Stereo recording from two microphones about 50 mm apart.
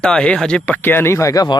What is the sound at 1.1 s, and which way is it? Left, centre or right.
Speech, left.